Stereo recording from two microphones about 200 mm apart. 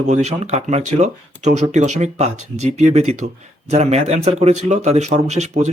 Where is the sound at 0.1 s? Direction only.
35° right (ahead or behind).